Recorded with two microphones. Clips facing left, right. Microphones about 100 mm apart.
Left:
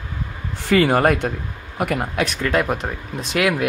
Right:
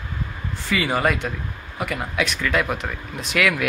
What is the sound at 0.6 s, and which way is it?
Speech, 50° left (ahead or behind).